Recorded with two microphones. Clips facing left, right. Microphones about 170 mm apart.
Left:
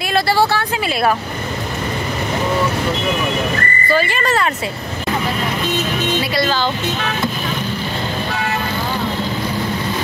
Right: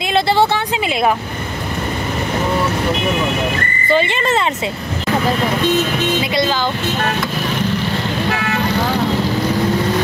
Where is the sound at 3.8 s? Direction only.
20° right (ahead or behind).